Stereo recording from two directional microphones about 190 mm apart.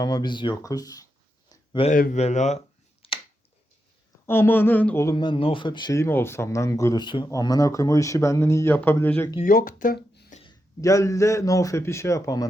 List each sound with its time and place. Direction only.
0.0 s speech: 20° left (ahead or behind)
1.5 s a sound: 25° left (ahead or behind)
1.9 s a man's voice: 45° left (ahead or behind)
2.2 s a sound: 35° left (ahead or behind)
4.3 s speech: 10° left (ahead or behind)
9.4 s speech: 50° left (ahead or behind)
10.4 s speech: 15° left (ahead or behind)